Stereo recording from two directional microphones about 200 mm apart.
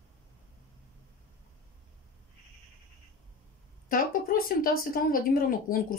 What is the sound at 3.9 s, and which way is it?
Speech, 45° left (ahead or behind).